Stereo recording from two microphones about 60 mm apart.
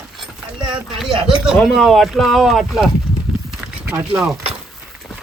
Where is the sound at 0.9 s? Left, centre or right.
Centre.